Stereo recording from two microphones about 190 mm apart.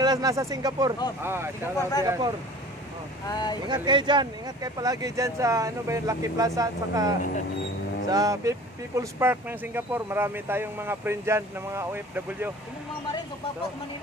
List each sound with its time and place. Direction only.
0.0 s speech: 20° right (ahead or behind)
1.8 s speech: 20° left (ahead or behind)
2.0 s speech: 20° right (ahead or behind)
3.3 s speech: 20° left (ahead or behind)
3.6 s speech: 25° right (ahead or behind)